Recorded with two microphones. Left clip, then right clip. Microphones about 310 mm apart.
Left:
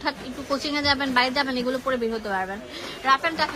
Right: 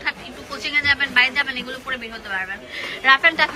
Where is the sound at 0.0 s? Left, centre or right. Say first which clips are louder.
Right 2 dB; centre.